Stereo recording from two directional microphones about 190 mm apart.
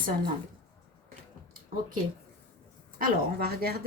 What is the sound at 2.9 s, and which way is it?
Speech, 50° right (ahead or behind).